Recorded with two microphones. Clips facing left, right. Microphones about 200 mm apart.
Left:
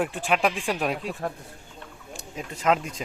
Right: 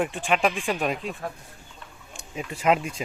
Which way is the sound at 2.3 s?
10° right (ahead or behind).